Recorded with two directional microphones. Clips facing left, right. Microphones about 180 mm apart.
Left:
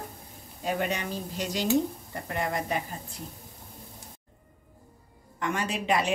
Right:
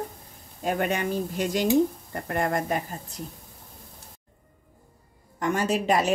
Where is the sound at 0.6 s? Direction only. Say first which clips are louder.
Right 4 dB; 50° right (ahead or behind).